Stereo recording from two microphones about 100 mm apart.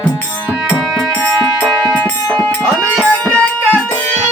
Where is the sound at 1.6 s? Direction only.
15° left (ahead or behind).